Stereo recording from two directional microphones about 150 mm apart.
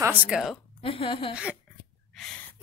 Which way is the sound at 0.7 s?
40° left (ahead or behind).